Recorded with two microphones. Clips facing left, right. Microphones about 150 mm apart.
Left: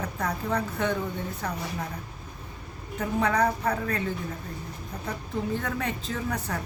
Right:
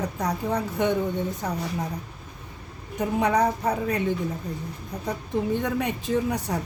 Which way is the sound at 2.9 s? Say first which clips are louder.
Right 3 dB; 15° right (ahead or behind).